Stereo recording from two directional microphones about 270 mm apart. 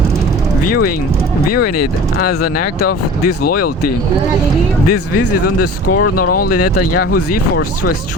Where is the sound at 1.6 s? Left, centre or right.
Left.